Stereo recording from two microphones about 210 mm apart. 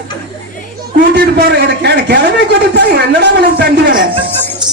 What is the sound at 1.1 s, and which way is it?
A man's voice, 55° right (ahead or behind).